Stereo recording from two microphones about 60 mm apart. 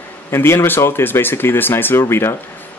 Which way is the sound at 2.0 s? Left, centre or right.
Left.